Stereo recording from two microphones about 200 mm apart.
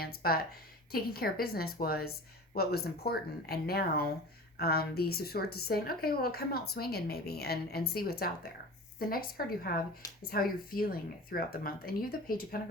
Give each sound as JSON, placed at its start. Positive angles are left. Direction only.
{"t": 0.0, "sound": "a woman's voice", "side_deg": 50}